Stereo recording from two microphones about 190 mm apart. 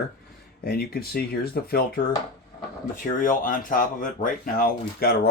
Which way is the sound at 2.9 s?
45° left (ahead or behind).